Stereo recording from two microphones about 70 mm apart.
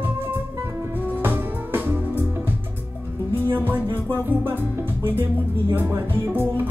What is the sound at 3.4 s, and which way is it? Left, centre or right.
Music, right.